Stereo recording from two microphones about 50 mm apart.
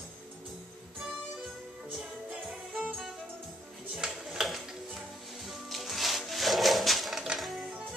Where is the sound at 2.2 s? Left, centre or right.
Right.